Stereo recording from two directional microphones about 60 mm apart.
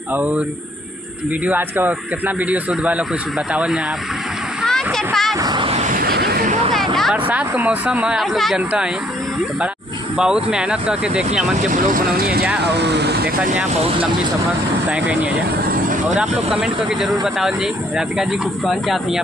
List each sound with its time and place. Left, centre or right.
0.1 s speech: right
1.7 s speech: right
4.6 s a sound: centre
6.7 s music: centre
7.5 s speech: right
8.2 s speech: centre
8.5 s speech: centre
10.2 s speech: centre
14.8 s speech: right
16.1 s speech: centre